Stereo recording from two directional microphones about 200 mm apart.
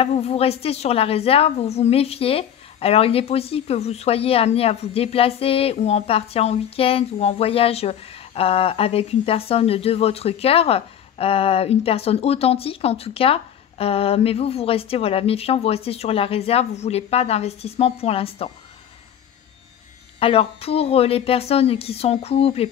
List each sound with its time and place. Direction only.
0.0 s a woman's voice: 30° left (ahead or behind)
20.2 s a woman's voice: 30° left (ahead or behind)